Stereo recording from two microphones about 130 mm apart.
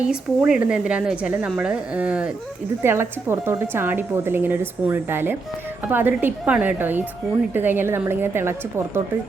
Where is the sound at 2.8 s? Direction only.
20° right (ahead or behind).